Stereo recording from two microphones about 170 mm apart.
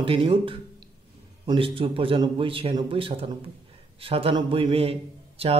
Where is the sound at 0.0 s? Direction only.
30° right (ahead or behind).